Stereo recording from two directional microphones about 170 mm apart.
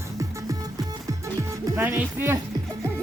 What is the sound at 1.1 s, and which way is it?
Music, 20° right (ahead or behind).